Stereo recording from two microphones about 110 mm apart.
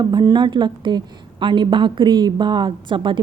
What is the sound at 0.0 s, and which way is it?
A woman's voice, 40° right (ahead or behind).